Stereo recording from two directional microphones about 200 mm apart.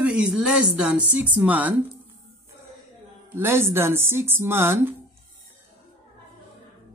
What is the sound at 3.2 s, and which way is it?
A man's voice, 10° right (ahead or behind).